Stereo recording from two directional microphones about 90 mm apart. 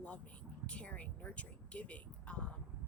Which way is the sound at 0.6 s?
15° left (ahead or behind).